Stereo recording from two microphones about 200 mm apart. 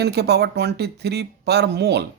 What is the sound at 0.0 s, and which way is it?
Speech, 55° right (ahead or behind).